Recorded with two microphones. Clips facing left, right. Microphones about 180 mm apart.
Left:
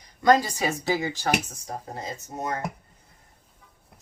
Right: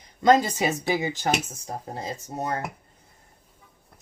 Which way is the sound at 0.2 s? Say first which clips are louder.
Right 1 dB; 20° right (ahead or behind).